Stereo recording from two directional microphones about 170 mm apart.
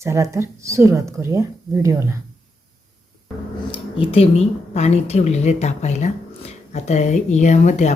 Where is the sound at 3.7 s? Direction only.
35° left (ahead or behind).